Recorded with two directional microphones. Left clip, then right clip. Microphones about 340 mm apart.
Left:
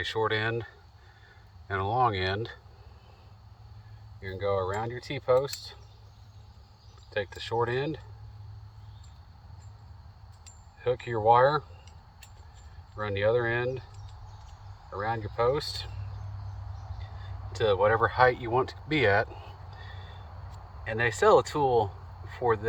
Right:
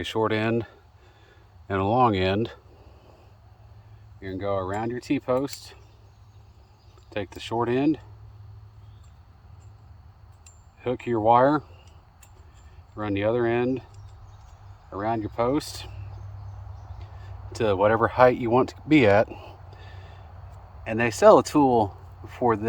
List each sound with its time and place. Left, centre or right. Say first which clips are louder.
0.0 s speech: right 3 dB; right
4.2 s speech: right 1 dB; right
7.1 s speech: right 1 dB; right
10.8 s speech: right 3 dB; right
13.0 s speech: right 2 dB; right
14.9 s speech: right 4 dB; right
17.5 s speech: right 3 dB; right
20.8 s speech: right 7 dB; right